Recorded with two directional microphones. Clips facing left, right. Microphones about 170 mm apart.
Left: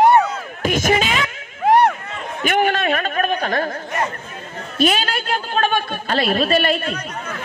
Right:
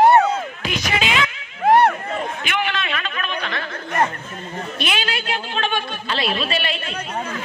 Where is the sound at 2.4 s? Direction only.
45° left (ahead or behind).